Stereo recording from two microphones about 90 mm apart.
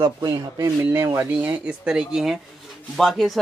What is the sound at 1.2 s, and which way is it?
Speech, 15° right (ahead or behind).